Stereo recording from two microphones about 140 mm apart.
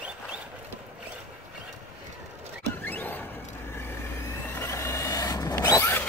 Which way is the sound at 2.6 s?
15° left (ahead or behind).